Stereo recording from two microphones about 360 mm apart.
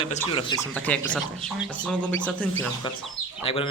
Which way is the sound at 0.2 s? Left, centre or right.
Centre.